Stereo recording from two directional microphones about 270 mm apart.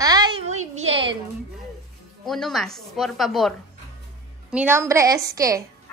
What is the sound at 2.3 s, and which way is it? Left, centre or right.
A woman's voice, centre.